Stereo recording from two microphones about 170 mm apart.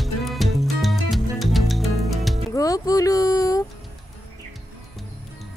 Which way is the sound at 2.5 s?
20° left (ahead or behind).